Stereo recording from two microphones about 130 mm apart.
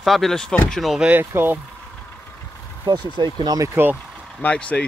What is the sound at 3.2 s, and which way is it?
Speech, 35° right (ahead or behind).